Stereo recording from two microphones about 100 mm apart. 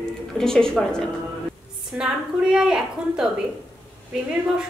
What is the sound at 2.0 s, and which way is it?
A woman's voice, 5° right (ahead or behind).